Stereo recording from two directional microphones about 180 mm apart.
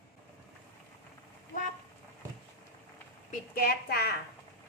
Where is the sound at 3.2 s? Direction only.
55° left (ahead or behind).